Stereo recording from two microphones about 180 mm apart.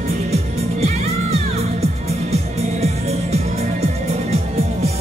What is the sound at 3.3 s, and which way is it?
Music, 35° right (ahead or behind).